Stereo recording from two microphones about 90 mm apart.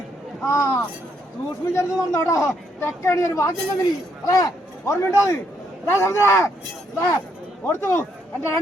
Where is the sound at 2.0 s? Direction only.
35° left (ahead or behind).